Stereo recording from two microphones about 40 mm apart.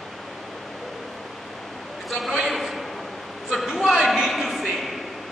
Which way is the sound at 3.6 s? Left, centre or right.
Centre.